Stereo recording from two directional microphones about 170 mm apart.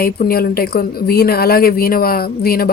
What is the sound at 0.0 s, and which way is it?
A woman's voice, 65° left (ahead or behind).